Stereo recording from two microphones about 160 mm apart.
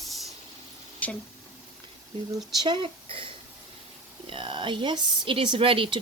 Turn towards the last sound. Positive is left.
turn(degrees=-35)  # may be behind; listen again after turning